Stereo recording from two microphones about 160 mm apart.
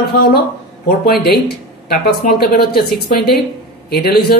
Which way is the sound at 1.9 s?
70° left (ahead or behind).